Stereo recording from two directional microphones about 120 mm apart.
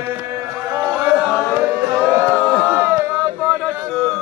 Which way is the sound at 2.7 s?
20° right (ahead or behind).